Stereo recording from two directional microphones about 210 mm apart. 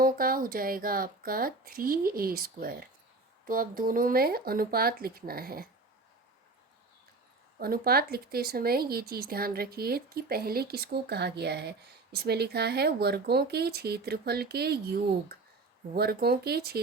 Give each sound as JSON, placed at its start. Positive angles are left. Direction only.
{"t": 0.0, "sound": "a woman's voice", "side_deg": -45}
{"t": 7.6, "sound": "a woman's voice", "side_deg": -45}